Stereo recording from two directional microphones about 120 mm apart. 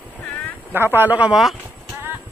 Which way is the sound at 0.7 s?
20° right (ahead or behind).